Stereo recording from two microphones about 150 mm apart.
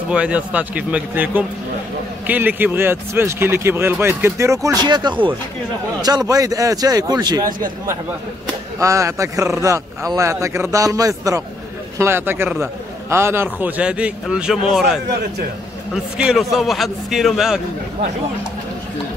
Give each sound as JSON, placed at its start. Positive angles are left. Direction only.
{"t": 0.1, "sound": "speech", "side_deg": -10}
{"t": 8.7, "sound": "a man's voice", "side_deg": -20}